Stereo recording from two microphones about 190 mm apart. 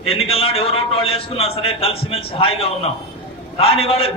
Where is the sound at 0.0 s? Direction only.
30° left (ahead or behind).